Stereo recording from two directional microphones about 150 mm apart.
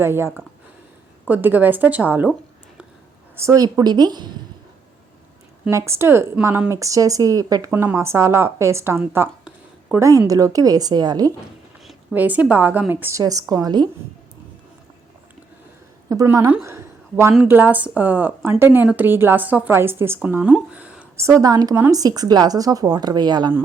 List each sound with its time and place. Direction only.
0.0 s speech: 15° right (ahead or behind)
3.3 s speech: 20° right (ahead or behind)
5.7 s speech: 20° right (ahead or behind)
12.1 s speech: 10° right (ahead or behind); by 13.8 s 25° right (ahead or behind)
16.0 s a woman's voice: 20° right (ahead or behind)
21.2 s speech: 20° right (ahead or behind)